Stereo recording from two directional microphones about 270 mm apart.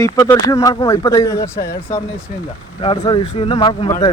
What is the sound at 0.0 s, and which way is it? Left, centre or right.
Speech, centre.